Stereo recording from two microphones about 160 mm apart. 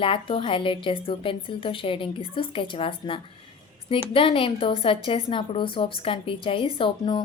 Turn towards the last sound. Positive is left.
turn(degrees=30)  # may be behind; listen again after turning